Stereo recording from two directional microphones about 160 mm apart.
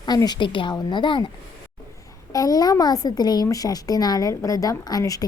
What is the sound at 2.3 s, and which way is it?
A woman's voice, 25° left (ahead or behind).